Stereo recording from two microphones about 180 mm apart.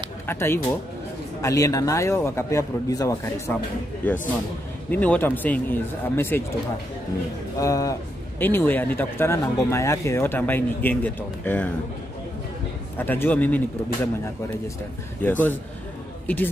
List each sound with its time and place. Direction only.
0.3 s a man's voice: 15° left (ahead or behind)
7.5 s a man's voice: 20° left (ahead or behind)
12.9 s a man's voice: 10° left (ahead or behind)
15.2 s a man's voice: 10° left (ahead or behind)